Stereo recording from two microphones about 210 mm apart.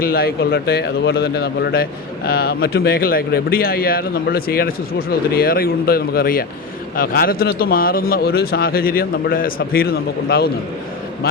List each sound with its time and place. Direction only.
0.0 s a man's voice: 45° left (ahead or behind)